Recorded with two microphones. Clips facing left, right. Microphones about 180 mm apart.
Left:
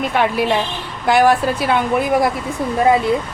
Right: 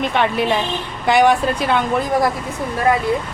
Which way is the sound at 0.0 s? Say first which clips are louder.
Left 1 dB; 5° left (ahead or behind).